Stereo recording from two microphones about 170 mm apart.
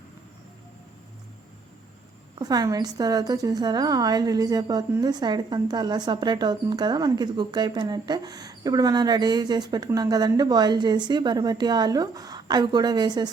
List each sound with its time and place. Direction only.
2.3 s a woman's voice: 20° right (ahead or behind)